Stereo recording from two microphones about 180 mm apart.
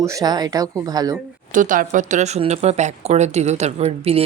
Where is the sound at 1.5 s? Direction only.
45° right (ahead or behind).